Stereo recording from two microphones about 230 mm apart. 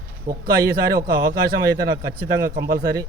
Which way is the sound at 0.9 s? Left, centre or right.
Right.